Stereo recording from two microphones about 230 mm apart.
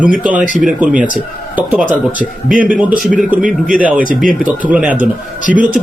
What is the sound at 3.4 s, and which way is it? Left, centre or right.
Speech, right.